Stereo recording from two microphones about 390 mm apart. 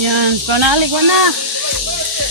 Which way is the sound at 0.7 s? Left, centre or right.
Right.